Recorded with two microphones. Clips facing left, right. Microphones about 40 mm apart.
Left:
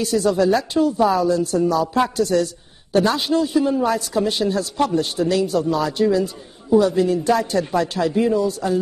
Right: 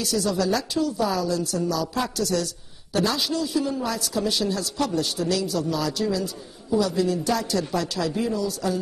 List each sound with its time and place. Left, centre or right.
0.0 s a woman's voice: left